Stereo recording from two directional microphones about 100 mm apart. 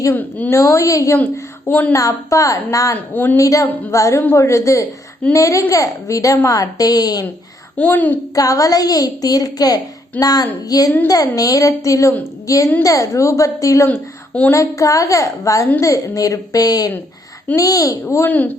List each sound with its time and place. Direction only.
0.1 s a child's voice: 15° left (ahead or behind)
0.5 s a woman's voice: 30° left (ahead or behind)
1.2 s speech: 15° left (ahead or behind)
2.0 s a woman's voice: 35° left (ahead or behind)
2.9 s speech: 20° left (ahead or behind)
3.3 s a woman's voice: 35° left (ahead or behind)
7.8 s a child's voice: 15° left (ahead or behind)
8.4 s a woman's voice: 35° left (ahead or behind)
13.8 s a woman's voice: 20° left (ahead or behind)
14.5 s a woman's voice: 35° left (ahead or behind)
18.3 s a child's voice: 15° left (ahead or behind)